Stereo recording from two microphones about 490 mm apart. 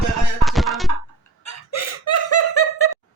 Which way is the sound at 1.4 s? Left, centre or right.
Left.